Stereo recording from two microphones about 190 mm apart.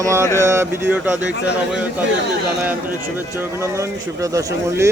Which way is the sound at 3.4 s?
15° right (ahead or behind).